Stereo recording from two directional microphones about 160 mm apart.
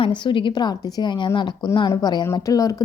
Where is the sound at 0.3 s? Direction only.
30° left (ahead or behind).